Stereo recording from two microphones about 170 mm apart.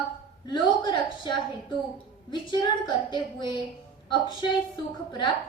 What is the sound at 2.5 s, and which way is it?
A woman's voice, 25° left (ahead or behind).